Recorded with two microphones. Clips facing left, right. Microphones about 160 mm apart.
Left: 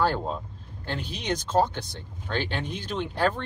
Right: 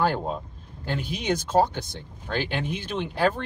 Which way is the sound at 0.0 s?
10° right (ahead or behind).